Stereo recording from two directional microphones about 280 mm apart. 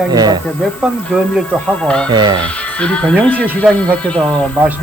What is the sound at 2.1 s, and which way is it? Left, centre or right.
Speech, centre.